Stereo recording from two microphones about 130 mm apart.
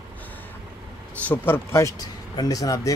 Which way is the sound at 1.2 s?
15° left (ahead or behind).